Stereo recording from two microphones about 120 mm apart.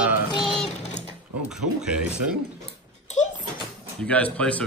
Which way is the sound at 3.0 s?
85° left.